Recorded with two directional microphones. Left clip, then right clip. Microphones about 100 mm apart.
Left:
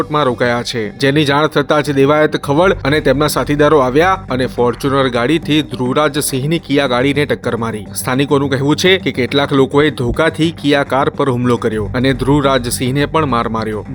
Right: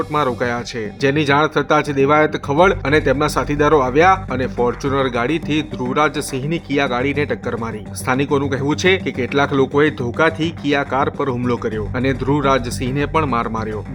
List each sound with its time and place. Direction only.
0.0 s speech: 40° left (ahead or behind)
8.0 s speech: 35° left (ahead or behind); by 11.8 s 55° left (ahead or behind)
11.9 s speech: 45° left (ahead or behind)